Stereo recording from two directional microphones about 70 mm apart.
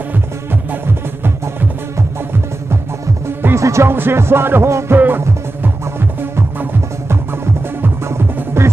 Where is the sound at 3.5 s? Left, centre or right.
Right.